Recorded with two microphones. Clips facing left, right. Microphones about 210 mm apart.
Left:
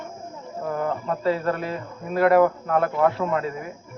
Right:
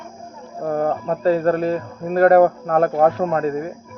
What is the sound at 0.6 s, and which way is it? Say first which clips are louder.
Speech: right 6 dB; 40° right (ahead or behind).